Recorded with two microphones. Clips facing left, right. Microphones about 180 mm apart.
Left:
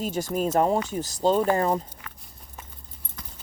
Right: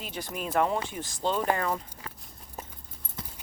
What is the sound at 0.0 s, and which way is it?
Speech, 45° left (ahead or behind).